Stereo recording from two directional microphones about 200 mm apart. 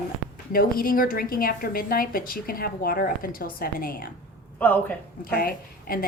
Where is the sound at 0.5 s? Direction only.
45° left (ahead or behind).